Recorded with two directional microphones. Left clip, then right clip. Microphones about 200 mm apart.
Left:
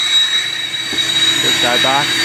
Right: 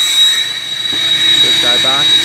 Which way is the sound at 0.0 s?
50° right (ahead or behind).